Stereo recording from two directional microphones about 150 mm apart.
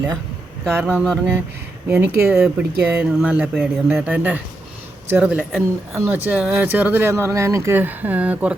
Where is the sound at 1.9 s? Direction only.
10° right (ahead or behind).